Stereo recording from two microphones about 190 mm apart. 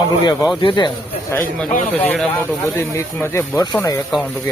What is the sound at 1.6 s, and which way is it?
Speech, 10° left (ahead or behind).